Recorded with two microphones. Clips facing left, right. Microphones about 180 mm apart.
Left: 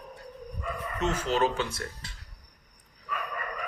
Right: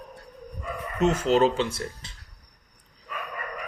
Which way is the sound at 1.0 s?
35° right (ahead or behind).